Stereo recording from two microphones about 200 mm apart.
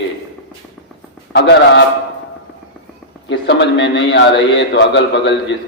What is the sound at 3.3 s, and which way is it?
A man's voice, 60° left (ahead or behind).